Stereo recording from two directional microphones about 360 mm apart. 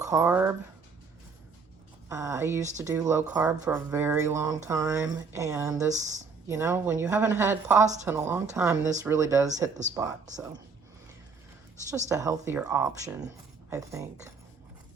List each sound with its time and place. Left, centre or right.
0.0 s speech: centre
2.0 s speech: centre
5.9 s speech: centre
6.5 s speech: centre
9.5 s speech: centre
9.9 s speech: centre
11.9 s speech: centre